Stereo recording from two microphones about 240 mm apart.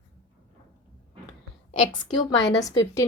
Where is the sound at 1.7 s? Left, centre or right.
Centre.